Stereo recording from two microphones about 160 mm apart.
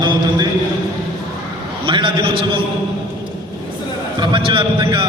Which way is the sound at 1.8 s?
30° right (ahead or behind).